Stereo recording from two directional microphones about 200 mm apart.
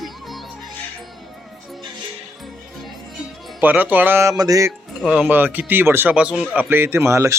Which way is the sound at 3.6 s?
10° right (ahead or behind).